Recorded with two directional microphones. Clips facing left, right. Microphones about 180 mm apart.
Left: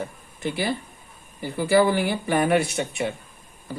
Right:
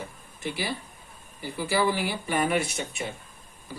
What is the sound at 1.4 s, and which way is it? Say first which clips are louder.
Speech: left 7 dB; 55° left (ahead or behind).